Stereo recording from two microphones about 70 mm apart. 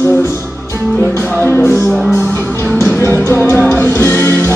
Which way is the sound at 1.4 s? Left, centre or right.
Left.